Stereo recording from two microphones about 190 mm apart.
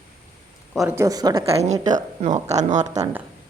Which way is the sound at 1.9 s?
40° right (ahead or behind).